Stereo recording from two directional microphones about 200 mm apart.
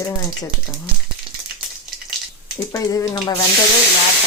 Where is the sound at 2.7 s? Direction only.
20° left (ahead or behind).